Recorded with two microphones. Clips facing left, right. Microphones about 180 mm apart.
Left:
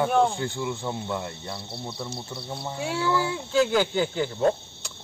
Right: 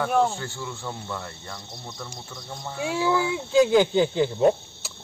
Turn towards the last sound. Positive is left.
turn(degrees=-15)  # may be behind; listen again after turning